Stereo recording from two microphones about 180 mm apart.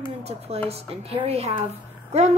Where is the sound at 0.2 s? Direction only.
35° right (ahead or behind).